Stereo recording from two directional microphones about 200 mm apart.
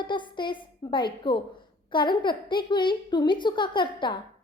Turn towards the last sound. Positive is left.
turn(degrees=25)  # may be behind; listen again after turning